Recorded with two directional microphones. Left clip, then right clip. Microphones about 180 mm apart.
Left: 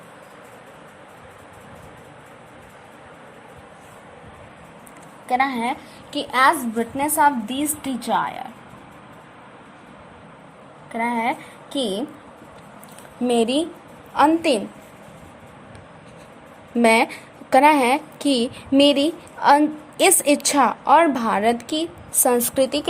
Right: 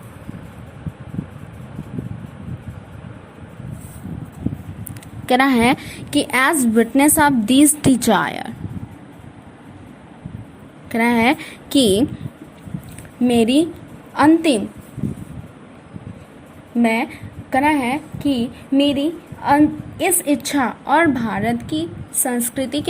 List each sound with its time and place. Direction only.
5.2 s a woman's voice: 30° right (ahead or behind)
6.1 s a woman's voice: 20° right (ahead or behind)
10.9 s a woman's voice: 30° right (ahead or behind)
13.2 s a woman's voice: 5° right (ahead or behind)
16.7 s a woman's voice: 10° left (ahead or behind)